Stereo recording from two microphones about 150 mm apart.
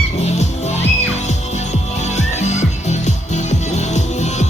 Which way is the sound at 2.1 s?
50° left (ahead or behind).